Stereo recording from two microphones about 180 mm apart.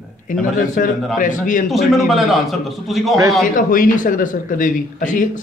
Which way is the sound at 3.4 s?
50° left (ahead or behind).